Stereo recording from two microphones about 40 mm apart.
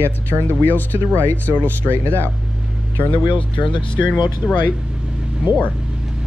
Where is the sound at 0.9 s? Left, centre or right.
Right.